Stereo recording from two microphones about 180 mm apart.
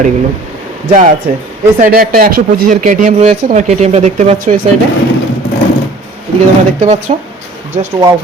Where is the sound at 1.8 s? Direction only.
55° right (ahead or behind).